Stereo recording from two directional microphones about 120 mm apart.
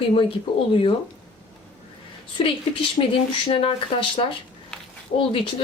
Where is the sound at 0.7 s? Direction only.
50° left (ahead or behind).